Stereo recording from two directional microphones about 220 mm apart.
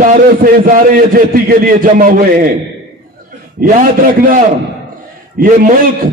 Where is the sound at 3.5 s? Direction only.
35° right (ahead or behind).